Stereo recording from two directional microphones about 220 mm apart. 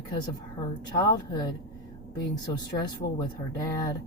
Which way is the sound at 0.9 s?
20° left (ahead or behind).